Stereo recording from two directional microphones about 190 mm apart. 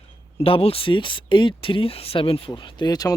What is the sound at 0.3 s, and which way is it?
Speech, 30° left (ahead or behind).